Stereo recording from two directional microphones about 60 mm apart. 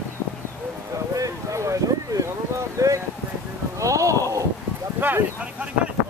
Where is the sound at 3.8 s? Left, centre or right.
Right.